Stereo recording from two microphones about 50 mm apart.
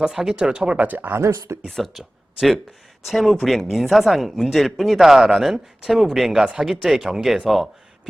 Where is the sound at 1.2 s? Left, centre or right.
Right.